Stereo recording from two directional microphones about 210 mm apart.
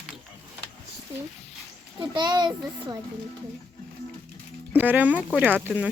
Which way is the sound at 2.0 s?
20° right (ahead or behind).